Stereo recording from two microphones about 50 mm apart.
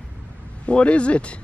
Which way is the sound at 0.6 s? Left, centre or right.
Left.